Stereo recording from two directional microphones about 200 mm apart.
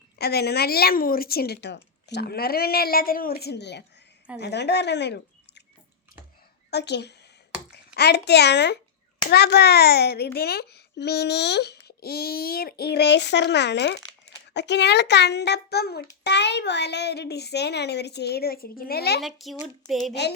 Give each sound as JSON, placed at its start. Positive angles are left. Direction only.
{"t": 0.2, "sound": "a woman's voice", "side_deg": 55}
{"t": 6.7, "sound": "a woman's voice", "side_deg": 55}
{"t": 19.2, "sound": "speech", "side_deg": 0}